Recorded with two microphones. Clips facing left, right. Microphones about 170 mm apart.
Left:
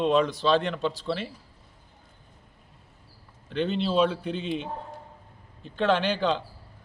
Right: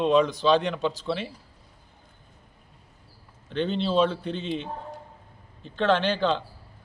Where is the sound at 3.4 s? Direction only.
5° left (ahead or behind).